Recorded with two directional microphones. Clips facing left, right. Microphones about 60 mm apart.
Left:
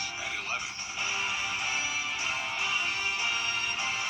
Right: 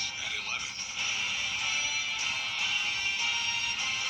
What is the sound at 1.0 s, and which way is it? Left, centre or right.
Music, left.